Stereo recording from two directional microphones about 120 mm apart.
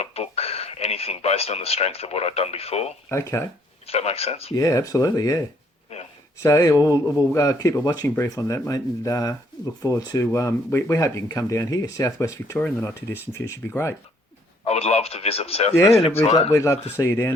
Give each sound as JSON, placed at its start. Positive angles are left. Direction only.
{"t": 0.0, "sound": "speech", "side_deg": 55}
{"t": 3.1, "sound": "speech", "side_deg": 20}
{"t": 3.8, "sound": "speech", "side_deg": 55}
{"t": 4.5, "sound": "speech", "side_deg": 30}
{"t": 6.4, "sound": "speech", "side_deg": 25}
{"t": 14.6, "sound": "speech", "side_deg": 60}
{"t": 16.5, "sound": "speech", "side_deg": 25}